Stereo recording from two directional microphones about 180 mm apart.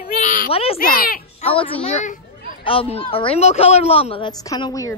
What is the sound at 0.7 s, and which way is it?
Speech, 55° left (ahead or behind).